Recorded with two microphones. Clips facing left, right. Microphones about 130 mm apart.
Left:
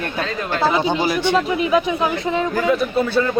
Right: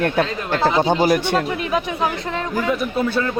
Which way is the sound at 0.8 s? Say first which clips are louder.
Right 2 dB; 45° right (ahead or behind).